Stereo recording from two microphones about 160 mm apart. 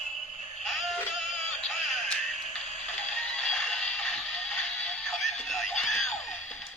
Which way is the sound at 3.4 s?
5° left (ahead or behind).